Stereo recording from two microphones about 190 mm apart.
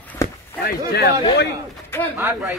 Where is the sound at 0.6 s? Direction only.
55° left (ahead or behind).